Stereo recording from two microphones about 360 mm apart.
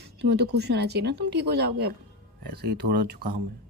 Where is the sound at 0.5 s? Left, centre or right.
Right.